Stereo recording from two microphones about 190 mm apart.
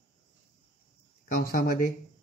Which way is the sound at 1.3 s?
50° left (ahead or behind).